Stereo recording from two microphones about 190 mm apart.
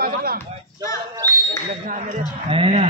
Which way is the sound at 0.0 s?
50° right (ahead or behind).